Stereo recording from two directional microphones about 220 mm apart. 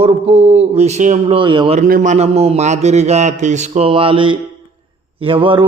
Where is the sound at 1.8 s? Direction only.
35° right (ahead or behind).